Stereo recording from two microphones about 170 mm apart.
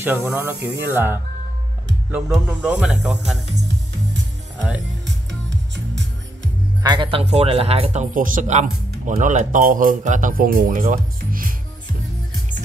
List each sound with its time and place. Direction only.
0.0 s speech: 10° right (ahead or behind)
4.6 s speech: 5° right (ahead or behind)
5.0 s music: 90° right
6.8 s speech: 25° right (ahead or behind); by 11.5 s 55° right (ahead or behind)